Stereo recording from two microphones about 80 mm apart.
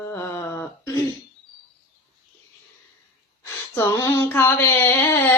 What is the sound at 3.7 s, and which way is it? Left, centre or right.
Female singing, left.